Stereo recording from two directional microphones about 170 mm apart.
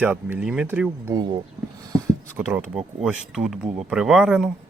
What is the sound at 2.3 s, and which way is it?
Speech, 10° right (ahead or behind).